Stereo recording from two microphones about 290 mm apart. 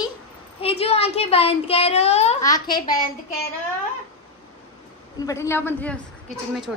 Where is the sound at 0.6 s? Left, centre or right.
Centre.